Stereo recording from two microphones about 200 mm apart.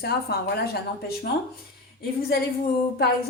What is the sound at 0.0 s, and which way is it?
A woman's voice, 55° left (ahead or behind).